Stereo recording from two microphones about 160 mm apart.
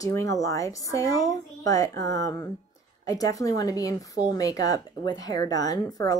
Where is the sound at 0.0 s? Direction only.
20° left (ahead or behind).